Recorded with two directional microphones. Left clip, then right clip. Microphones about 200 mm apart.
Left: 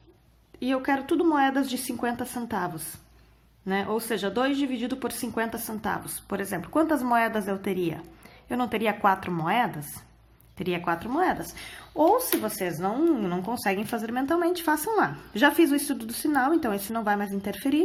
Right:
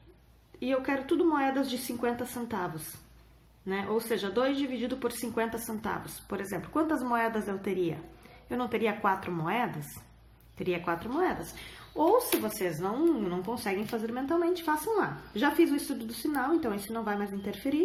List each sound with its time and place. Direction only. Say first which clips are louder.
0.6 s speech: left 4 dB; 40° left (ahead or behind)